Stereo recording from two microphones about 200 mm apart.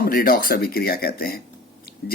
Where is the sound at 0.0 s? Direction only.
45° left (ahead or behind).